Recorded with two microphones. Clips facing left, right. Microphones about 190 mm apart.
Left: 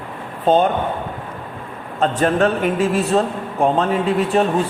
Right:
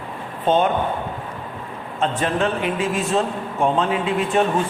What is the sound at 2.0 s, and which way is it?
Speech, 45° left (ahead or behind).